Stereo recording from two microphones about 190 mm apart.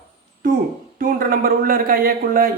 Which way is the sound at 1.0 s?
50° right (ahead or behind).